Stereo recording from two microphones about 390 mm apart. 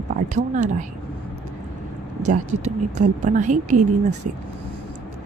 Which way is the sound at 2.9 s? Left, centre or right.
Centre.